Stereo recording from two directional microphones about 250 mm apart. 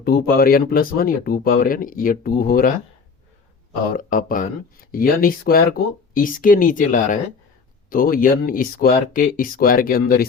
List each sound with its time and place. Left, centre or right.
0.0 s speech: left
3.9 s speech: left